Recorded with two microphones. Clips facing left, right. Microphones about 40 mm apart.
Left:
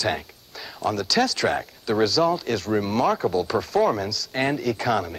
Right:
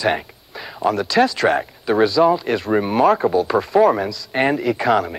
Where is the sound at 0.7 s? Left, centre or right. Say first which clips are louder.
Right 6 dB; right.